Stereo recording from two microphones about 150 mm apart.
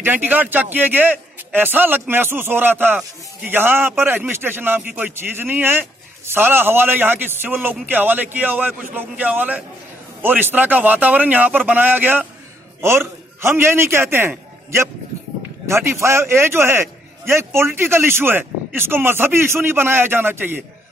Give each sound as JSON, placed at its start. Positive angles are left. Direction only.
{"t": 0.0, "sound": "a man's voice", "side_deg": -15}